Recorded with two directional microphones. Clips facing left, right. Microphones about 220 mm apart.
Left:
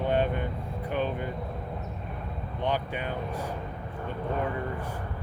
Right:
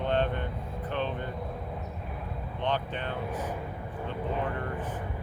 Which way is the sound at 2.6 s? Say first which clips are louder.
Left 1 dB; 10° left (ahead or behind).